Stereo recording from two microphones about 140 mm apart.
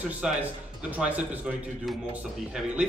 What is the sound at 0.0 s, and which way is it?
Speech, 10° right (ahead or behind).